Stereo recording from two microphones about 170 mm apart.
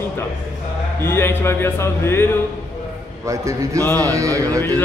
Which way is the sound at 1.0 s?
15° left (ahead or behind).